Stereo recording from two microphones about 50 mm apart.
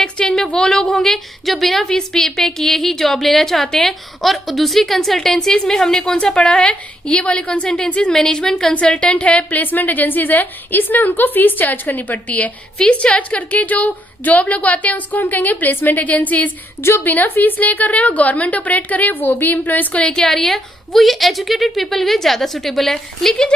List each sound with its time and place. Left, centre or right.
0.0 s a woman's voice: centre
8.1 s a woman's voice: centre
8.7 s a woman's voice: left
12.8 s a woman's voice: left
20.0 s a woman's voice: centre